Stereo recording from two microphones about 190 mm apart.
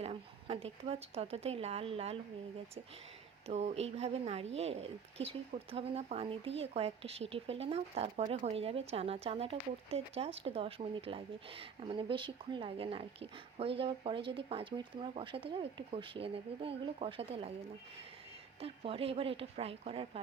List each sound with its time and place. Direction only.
0.0 s a woman's voice: 30° right (ahead or behind)
3.4 s speech: 35° right (ahead or behind)
18.6 s speech: 30° right (ahead or behind)